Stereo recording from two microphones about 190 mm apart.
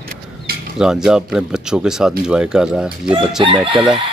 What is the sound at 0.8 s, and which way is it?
Speech, 5° right (ahead or behind).